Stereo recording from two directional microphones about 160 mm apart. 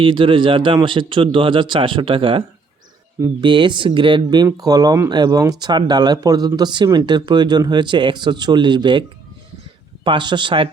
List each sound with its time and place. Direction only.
0.0 s speech: 30° right (ahead or behind)
3.4 s speech: 30° right (ahead or behind)